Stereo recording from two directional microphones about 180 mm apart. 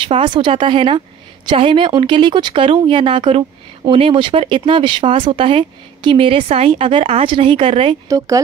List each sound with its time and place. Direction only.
0.1 s a woman's voice: 25° right (ahead or behind)